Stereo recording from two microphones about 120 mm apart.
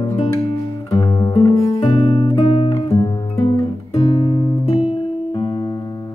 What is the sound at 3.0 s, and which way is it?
Music, 35° left (ahead or behind).